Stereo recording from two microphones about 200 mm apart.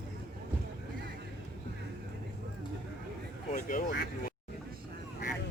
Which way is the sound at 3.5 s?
40° left (ahead or behind).